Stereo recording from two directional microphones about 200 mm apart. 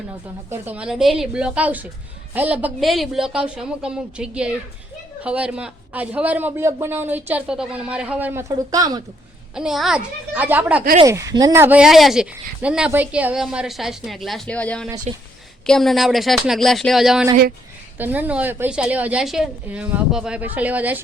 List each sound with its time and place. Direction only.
0.5 s speech: 10° right (ahead or behind)
9.6 s speech: centre (ahead or behind)
15.1 s speech: 35° right (ahead or behind)
15.6 s speech: centre (ahead or behind)